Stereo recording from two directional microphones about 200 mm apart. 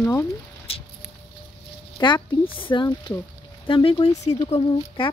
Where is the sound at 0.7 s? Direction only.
30° left (ahead or behind).